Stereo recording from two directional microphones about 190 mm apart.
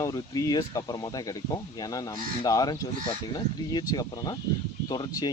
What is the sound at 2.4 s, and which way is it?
Speech, 20° left (ahead or behind).